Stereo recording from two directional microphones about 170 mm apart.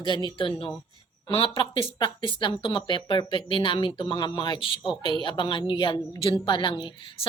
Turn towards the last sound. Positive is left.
turn(degrees=30)  # may be behind; listen again after turning